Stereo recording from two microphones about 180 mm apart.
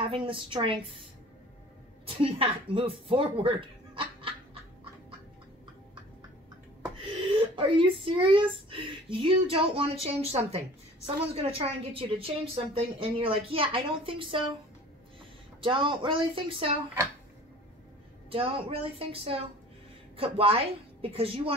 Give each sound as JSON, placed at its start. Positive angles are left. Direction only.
{"t": 0.1, "sound": "speech", "side_deg": -30}
{"t": 2.0, "sound": "speech", "side_deg": -30}
{"t": 7.0, "sound": "a woman's voice", "side_deg": -30}
{"t": 15.6, "sound": "speech", "side_deg": -30}
{"t": 18.3, "sound": "a woman's voice", "side_deg": -30}